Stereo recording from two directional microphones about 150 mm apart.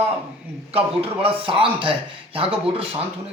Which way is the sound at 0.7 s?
40° right (ahead or behind).